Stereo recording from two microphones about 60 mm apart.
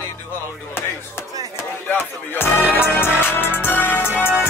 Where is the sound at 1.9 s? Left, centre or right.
Left.